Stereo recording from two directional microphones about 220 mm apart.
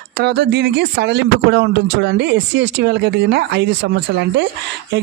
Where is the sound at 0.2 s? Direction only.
50° right (ahead or behind).